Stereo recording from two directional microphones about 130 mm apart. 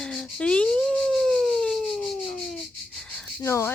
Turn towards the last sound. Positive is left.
turn(degrees=20)  # may be behind; listen again after turning